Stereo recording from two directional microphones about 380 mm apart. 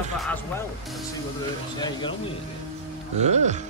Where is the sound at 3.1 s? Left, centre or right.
Centre.